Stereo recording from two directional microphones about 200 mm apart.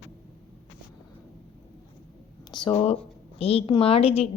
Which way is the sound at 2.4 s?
20° left (ahead or behind).